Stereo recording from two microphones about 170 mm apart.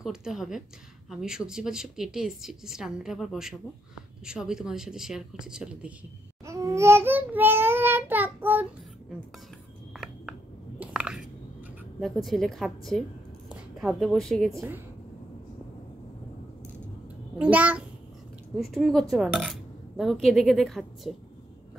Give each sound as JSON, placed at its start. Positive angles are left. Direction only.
{"t": 0.0, "sound": "speech", "side_deg": -5}
{"t": 6.4, "sound": "child singing", "side_deg": -15}
{"t": 10.8, "sound": "a sound", "side_deg": -5}
{"t": 12.0, "sound": "a woman's voice", "side_deg": 0}
{"t": 17.4, "sound": "a child's voice", "side_deg": -10}